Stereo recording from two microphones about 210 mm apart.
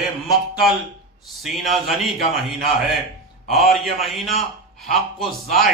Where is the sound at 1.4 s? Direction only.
Centre (ahead or behind).